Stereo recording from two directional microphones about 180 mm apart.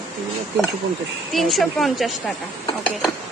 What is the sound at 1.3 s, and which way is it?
Speech, centre (ahead or behind).